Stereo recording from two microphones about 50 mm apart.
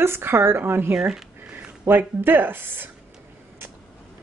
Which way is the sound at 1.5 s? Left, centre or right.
Right.